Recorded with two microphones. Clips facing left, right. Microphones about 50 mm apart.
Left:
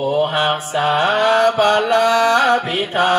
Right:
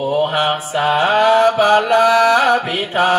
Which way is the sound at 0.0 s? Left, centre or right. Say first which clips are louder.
Right 1 dB; centre.